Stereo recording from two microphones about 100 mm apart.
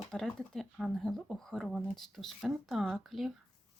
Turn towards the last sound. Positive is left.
turn(degrees=0)  # may be behind; listen again after turning